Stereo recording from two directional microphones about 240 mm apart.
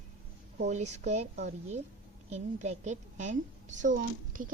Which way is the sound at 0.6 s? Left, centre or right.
Right.